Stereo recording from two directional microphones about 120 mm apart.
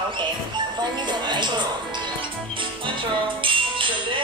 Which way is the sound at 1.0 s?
40° right (ahead or behind).